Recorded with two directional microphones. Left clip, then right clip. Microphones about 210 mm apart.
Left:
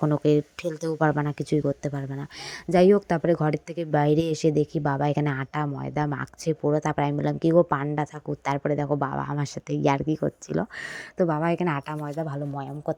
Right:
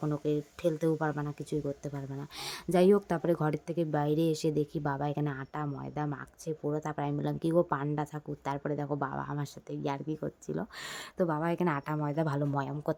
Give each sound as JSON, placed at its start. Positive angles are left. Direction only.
{"t": 0.0, "sound": "speech", "side_deg": 25}
{"t": 12.1, "sound": "speech", "side_deg": 0}